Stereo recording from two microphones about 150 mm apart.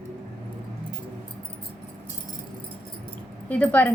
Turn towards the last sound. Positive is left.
turn(degrees=10)  # may be behind; listen again after turning